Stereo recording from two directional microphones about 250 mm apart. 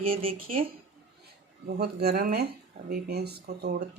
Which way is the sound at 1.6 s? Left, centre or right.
Right.